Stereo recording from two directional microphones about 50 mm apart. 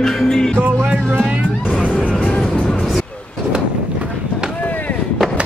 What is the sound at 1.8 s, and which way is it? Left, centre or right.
Music, left.